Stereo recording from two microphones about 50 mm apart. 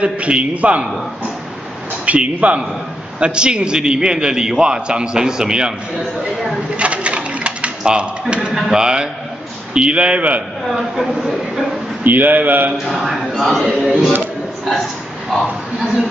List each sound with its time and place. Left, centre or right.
0.0 s a man's voice: right
2.0 s a man's voice: right
6.8 s sewing machine: right
7.8 s a man's voice: right
10.7 s speech: centre
12.0 s a man's voice: right
12.7 s speech: centre
15.3 s speech: centre